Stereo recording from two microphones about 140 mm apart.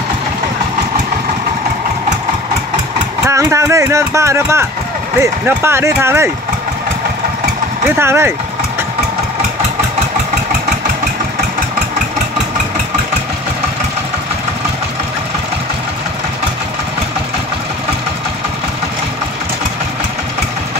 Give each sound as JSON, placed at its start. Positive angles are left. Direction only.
{"t": 3.3, "sound": "speech", "side_deg": -20}
{"t": 8.0, "sound": "speech", "side_deg": -15}